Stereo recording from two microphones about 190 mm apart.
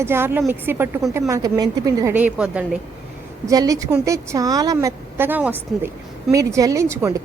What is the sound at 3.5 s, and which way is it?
A woman's voice, 20° right (ahead or behind).